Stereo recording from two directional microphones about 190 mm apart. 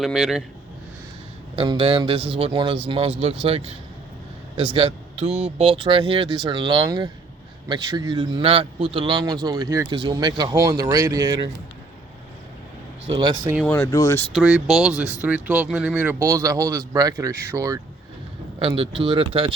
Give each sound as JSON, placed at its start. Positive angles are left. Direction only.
{"t": 0.0, "sound": "speech", "side_deg": 0}
{"t": 1.5, "sound": "a man's voice", "side_deg": -25}
{"t": 13.1, "sound": "a man's voice", "side_deg": -25}
{"t": 13.7, "sound": "speech", "side_deg": 15}
{"t": 14.3, "sound": "speech", "side_deg": -5}
{"t": 18.6, "sound": "a man's voice", "side_deg": -30}